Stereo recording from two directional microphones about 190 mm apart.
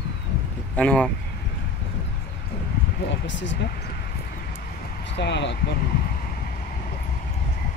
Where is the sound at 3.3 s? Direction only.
70° left (ahead or behind).